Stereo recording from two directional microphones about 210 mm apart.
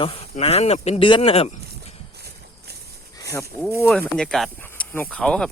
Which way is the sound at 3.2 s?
15° left (ahead or behind).